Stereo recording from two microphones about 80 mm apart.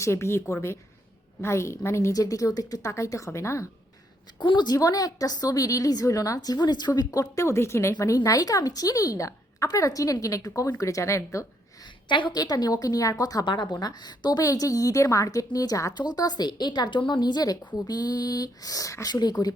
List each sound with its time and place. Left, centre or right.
0.0 s a woman's voice: left
2.1 s a woman's voice: left
2.9 s a woman's voice: left
4.4 s a woman's voice: left
8.0 s a woman's voice: left
11.8 s a woman's voice: left
13.4 s a woman's voice: left
19.1 s a woman's voice: left